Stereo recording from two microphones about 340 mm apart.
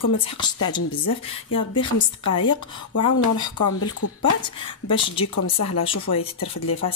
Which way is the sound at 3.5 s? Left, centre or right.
Left.